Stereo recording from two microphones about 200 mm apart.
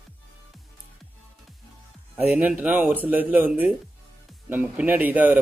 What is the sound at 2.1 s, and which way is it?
Speech, 10° right (ahead or behind).